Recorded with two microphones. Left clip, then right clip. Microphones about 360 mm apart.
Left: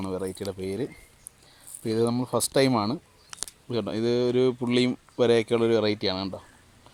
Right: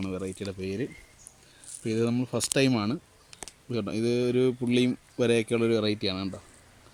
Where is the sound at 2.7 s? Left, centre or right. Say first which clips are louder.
Left 3 dB; centre.